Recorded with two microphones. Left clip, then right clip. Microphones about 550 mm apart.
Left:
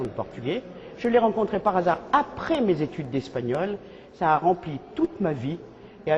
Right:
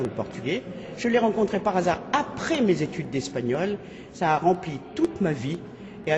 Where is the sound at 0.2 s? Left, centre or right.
Left.